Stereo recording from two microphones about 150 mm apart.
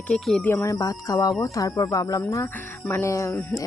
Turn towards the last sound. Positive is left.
turn(degrees=20)  # may be behind; listen again after turning